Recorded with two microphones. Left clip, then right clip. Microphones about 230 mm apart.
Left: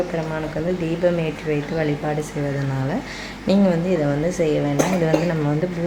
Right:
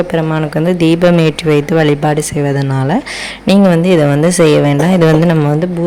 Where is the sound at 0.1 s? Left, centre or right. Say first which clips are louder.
Right 10 dB; right.